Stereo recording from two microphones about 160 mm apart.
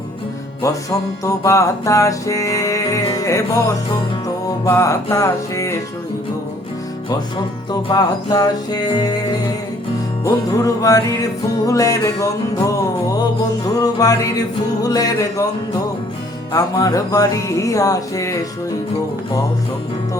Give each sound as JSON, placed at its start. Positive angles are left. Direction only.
{"t": 0.6, "sound": "music", "side_deg": 20}
{"t": 7.7, "sound": "music", "side_deg": 25}
{"t": 13.7, "sound": "music", "side_deg": 20}